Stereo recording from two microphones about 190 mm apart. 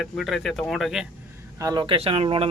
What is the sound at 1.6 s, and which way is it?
Speech, 20° right (ahead or behind).